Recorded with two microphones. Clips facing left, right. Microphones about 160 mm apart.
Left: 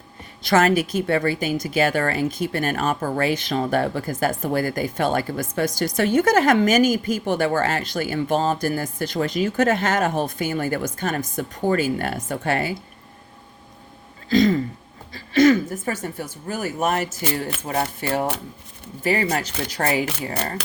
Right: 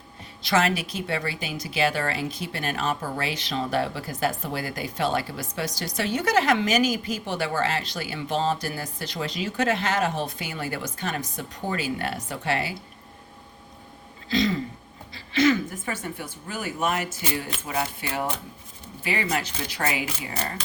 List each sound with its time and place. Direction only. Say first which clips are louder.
0.4 s speech: left 6 dB; 50° left (ahead or behind)
14.3 s speech: left 7 dB; 45° left (ahead or behind)